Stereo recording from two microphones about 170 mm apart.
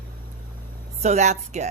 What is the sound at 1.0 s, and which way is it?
Speech, 40° right (ahead or behind).